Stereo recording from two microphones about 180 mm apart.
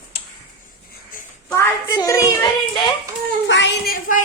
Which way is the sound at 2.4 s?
20° left (ahead or behind).